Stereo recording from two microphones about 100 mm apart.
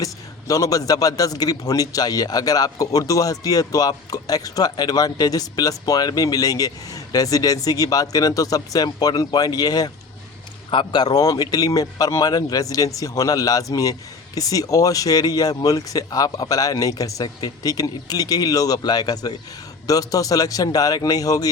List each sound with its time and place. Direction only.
0.0 s a man's voice: 35° left (ahead or behind)
10.7 s a man's voice: 50° left (ahead or behind)